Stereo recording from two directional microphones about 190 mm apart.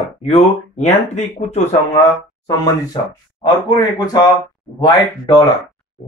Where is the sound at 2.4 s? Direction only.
20° left (ahead or behind).